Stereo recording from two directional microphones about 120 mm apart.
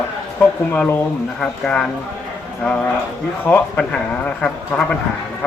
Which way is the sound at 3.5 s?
10° left (ahead or behind).